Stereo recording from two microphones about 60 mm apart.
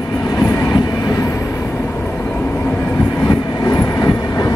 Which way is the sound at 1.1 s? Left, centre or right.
Left.